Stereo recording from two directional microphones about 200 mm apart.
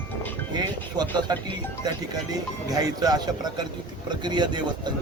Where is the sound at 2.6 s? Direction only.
20° right (ahead or behind).